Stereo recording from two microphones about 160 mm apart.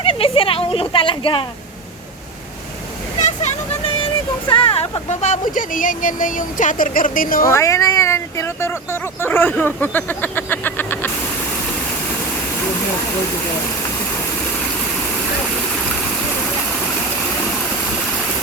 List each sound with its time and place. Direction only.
0.0 s a sound: 35° left (ahead or behind)
3.2 s speech: 45° left (ahead or behind)
7.4 s speech: 20° left (ahead or behind)